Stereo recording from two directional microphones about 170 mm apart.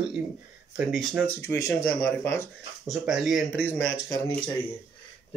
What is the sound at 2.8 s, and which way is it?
Speech, centre (ahead or behind).